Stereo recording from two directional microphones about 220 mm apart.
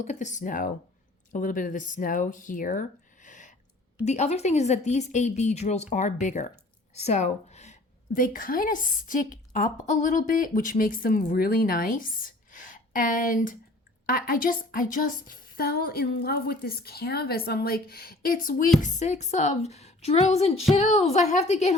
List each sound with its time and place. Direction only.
0.0 s a woman's voice: 35° left (ahead or behind)
3.2 s a sound: 35° left (ahead or behind)
4.0 s a woman's voice: 30° left (ahead or behind)